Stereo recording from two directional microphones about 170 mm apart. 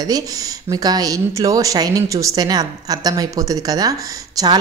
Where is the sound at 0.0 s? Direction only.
20° right (ahead or behind).